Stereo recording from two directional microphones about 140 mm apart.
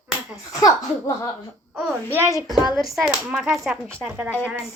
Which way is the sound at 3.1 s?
15° right (ahead or behind).